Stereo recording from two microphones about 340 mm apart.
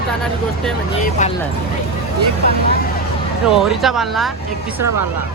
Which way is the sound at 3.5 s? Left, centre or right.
Centre.